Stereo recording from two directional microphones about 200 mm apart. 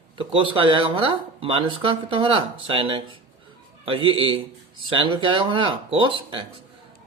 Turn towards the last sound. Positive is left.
turn(degrees=-25)  # may be behind; listen again after turning